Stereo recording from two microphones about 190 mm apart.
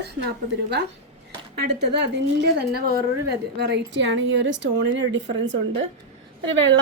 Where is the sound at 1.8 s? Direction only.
65° right (ahead or behind).